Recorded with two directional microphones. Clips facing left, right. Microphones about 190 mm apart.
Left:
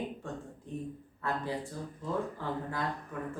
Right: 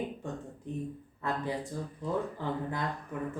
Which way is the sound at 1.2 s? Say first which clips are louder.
Right 1 dB; 20° right (ahead or behind).